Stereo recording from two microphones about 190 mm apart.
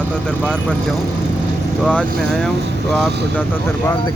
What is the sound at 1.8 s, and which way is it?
Speech, 5° left (ahead or behind).